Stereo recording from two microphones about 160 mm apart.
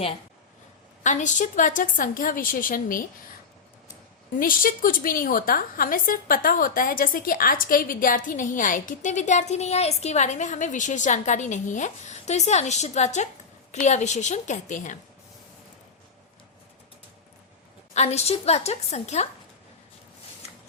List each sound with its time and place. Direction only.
1.0 s a woman's voice: 50° left (ahead or behind)
4.4 s a woman's voice: 60° left (ahead or behind)
17.9 s a woman's voice: 45° left (ahead or behind)